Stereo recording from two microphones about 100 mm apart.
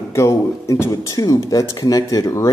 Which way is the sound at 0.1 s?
30° left (ahead or behind).